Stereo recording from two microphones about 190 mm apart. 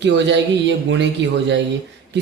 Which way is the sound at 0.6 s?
70° right (ahead or behind).